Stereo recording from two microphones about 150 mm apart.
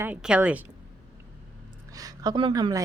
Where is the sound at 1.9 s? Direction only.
25° right (ahead or behind).